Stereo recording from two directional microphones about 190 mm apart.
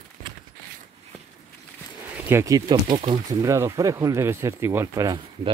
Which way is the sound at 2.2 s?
15° right (ahead or behind).